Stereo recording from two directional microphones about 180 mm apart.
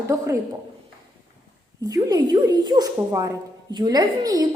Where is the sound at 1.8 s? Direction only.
20° right (ahead or behind).